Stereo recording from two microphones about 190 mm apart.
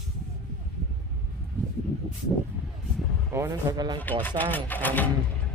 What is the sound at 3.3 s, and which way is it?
Speech, 15° right (ahead or behind).